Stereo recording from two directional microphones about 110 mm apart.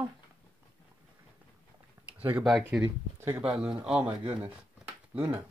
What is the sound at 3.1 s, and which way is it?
Speech, 25° right (ahead or behind).